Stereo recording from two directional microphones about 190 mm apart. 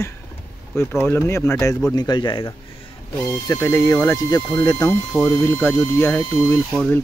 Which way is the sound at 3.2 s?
10° left (ahead or behind).